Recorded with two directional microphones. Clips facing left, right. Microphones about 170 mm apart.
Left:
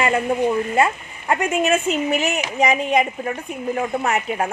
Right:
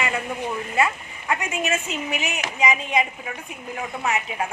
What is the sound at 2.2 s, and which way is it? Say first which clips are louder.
Speech: left 5 dB; 50° left (ahead or behind).